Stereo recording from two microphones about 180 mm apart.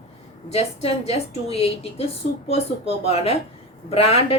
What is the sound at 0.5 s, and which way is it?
A woman's voice, 35° left (ahead or behind).